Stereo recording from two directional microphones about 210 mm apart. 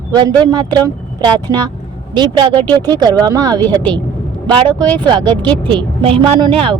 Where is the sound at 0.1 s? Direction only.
20° right (ahead or behind).